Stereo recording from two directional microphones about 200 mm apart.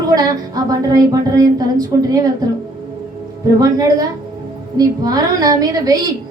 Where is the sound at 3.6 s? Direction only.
15° right (ahead or behind).